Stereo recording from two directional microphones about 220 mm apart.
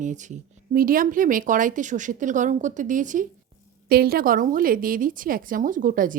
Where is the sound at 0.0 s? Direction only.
35° right (ahead or behind).